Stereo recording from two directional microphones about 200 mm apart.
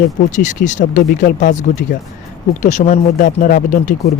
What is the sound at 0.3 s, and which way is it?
Speech, 40° left (ahead or behind).